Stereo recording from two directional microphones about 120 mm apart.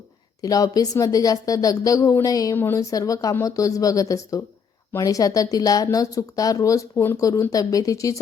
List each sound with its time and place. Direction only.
0.4 s speech: 30° left (ahead or behind)
2.6 s speech: 20° left (ahead or behind)
2.9 s speech: 30° left (ahead or behind)